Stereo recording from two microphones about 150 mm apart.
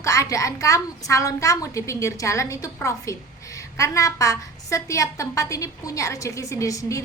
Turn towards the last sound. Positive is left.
turn(degrees=20)  # may be behind; listen again after turning